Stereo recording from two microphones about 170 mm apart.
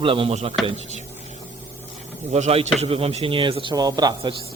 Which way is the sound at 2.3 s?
40° right (ahead or behind).